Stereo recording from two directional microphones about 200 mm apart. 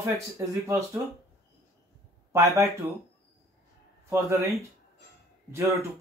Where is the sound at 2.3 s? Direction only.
15° right (ahead or behind).